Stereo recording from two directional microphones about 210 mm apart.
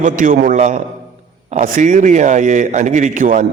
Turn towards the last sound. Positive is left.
turn(degrees=-40)  # may be behind; listen again after turning